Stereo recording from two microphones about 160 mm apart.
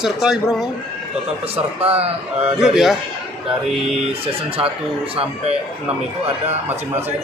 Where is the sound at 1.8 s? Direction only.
40° right (ahead or behind).